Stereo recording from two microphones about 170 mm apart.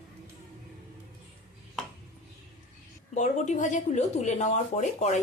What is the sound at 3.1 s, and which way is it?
Speech, 45° left (ahead or behind).